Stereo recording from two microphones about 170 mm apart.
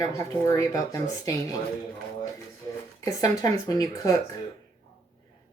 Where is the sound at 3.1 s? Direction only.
20° left (ahead or behind).